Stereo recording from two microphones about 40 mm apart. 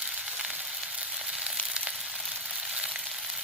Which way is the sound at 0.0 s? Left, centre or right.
Right.